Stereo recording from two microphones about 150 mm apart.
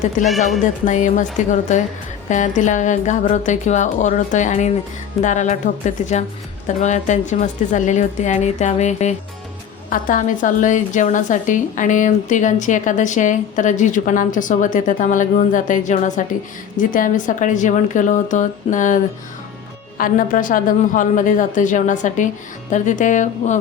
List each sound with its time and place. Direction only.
0.2 s a woman's voice: 55° left (ahead or behind)
9.9 s a woman's voice: 60° left (ahead or behind)
20.0 s a woman's voice: 65° left (ahead or behind)